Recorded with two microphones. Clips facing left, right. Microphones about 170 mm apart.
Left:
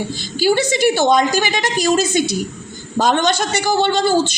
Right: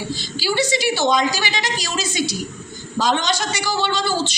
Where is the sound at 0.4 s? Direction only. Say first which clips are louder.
Left 6 dB; 50° left (ahead or behind).